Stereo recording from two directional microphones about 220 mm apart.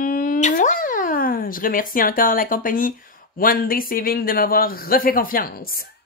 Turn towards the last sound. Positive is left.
turn(degrees=40)  # may be behind; listen again after turning